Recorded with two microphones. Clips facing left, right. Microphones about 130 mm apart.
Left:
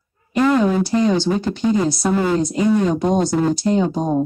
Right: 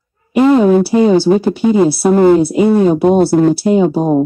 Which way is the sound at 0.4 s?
25° right (ahead or behind).